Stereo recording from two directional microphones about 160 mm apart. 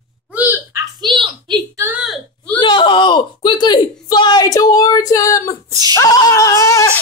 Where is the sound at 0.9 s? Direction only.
30° right (ahead or behind).